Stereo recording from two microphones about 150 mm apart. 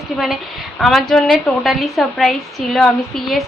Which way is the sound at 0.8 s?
Centre (ahead or behind).